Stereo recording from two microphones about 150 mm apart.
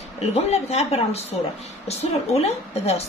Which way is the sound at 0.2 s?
45° left (ahead or behind).